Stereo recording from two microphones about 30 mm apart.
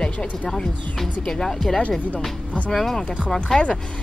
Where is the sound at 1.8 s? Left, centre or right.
Left.